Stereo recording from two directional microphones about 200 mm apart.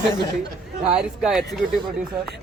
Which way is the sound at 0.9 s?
5° right (ahead or behind).